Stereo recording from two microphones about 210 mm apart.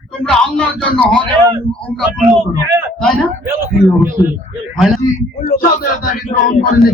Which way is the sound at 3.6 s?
10° right (ahead or behind).